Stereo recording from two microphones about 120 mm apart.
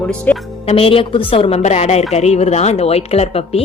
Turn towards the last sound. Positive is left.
turn(degrees=55)  # may be behind; listen again after turning